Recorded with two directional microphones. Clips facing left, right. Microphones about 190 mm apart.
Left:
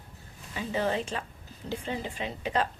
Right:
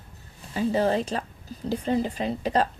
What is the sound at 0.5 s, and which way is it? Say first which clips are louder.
A woman's voice: right 6 dB; 35° right (ahead or behind).